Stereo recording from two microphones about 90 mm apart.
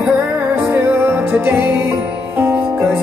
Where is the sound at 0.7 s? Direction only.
25° right (ahead or behind).